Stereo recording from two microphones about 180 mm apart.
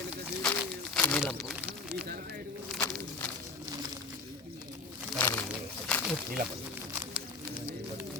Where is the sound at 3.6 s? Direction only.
20° right (ahead or behind).